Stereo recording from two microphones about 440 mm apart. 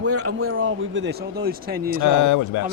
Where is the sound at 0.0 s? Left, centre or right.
Right.